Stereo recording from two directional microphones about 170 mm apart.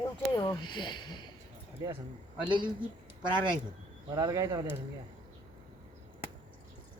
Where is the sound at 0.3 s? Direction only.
25° left (ahead or behind).